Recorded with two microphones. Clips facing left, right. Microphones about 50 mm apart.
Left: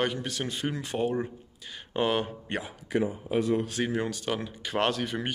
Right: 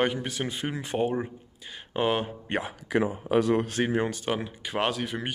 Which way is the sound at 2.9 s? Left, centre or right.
Right.